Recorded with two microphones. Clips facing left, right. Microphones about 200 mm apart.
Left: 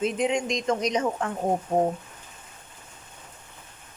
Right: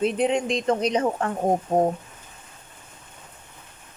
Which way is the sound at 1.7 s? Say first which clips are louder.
Right 2 dB; 45° right (ahead or behind).